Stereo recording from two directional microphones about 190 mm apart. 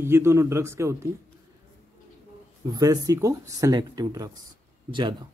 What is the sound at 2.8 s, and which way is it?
Speech, 20° right (ahead or behind).